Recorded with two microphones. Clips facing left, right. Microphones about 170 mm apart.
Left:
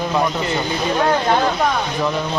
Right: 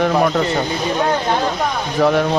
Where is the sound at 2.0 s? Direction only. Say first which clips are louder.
Right 10 dB; 70° right (ahead or behind).